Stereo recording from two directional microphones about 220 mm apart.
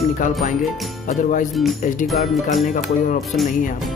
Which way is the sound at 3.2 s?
Centre (ahead or behind).